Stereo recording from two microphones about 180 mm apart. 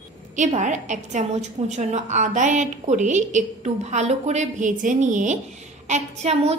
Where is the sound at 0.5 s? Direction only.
40° right (ahead or behind).